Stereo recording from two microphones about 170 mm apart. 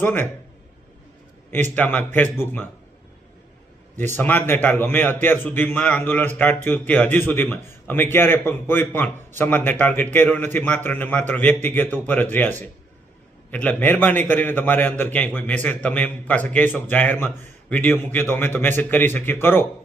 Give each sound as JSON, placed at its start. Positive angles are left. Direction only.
{"t": 0.0, "sound": "a man's voice", "side_deg": 10}
{"t": 1.7, "sound": "a man's voice", "side_deg": 10}
{"t": 4.1, "sound": "a man's voice", "side_deg": 10}